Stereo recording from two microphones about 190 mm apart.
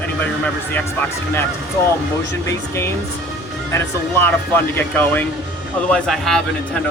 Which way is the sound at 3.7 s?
10° left (ahead or behind).